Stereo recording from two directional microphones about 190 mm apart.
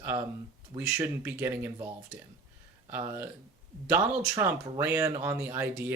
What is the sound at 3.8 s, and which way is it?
Speech, 15° right (ahead or behind).